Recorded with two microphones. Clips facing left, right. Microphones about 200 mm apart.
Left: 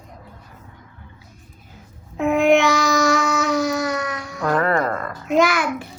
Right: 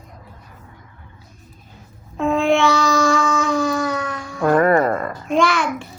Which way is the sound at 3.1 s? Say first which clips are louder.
Right 1 dB; 70° left (ahead or behind).